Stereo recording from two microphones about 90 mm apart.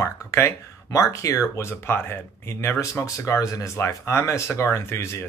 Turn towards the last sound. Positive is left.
turn(degrees=30)  # may be behind; listen again after turning